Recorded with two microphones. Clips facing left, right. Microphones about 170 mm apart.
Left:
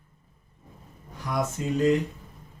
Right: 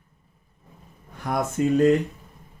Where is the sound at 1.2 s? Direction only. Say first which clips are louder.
Right 5 dB; 55° right (ahead or behind).